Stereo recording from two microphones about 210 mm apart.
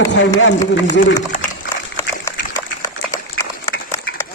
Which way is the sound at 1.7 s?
10° left (ahead or behind).